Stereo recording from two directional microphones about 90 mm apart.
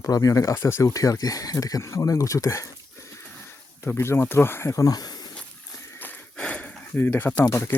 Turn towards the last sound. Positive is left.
turn(degrees=30)  # may be behind; listen again after turning